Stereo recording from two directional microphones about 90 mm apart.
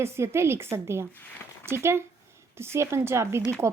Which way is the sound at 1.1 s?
20° left (ahead or behind).